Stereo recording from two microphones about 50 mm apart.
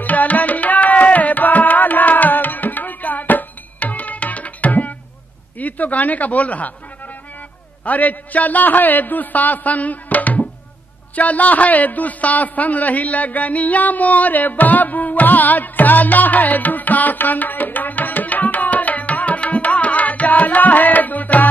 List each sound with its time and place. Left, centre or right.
0.0 s music: left
5.6 s speech: left
7.8 s a man's voice: left